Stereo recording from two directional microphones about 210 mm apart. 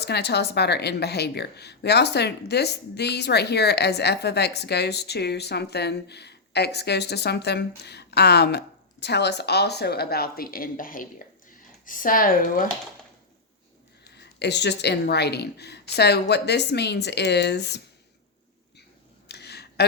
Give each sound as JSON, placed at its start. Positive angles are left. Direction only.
{"t": 0.0, "sound": "speech", "side_deg": 50}
{"t": 14.2, "sound": "speech", "side_deg": 55}
{"t": 19.3, "sound": "a sound", "side_deg": 50}